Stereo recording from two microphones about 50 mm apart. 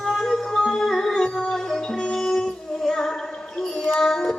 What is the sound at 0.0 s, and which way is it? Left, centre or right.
Music, centre.